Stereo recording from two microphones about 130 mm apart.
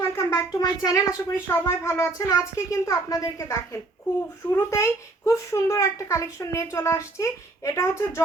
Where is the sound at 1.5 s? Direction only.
20° left (ahead or behind).